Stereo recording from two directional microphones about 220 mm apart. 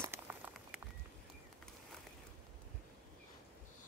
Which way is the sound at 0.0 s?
10° right (ahead or behind).